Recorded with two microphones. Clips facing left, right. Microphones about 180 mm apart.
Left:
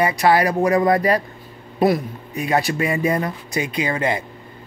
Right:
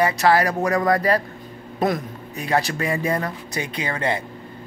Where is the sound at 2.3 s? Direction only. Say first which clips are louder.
Left 2 dB; 10° left (ahead or behind).